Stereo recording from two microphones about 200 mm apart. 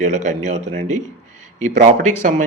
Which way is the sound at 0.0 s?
35° right (ahead or behind).